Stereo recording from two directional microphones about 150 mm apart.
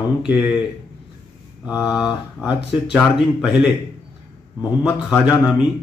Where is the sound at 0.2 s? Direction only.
5° right (ahead or behind).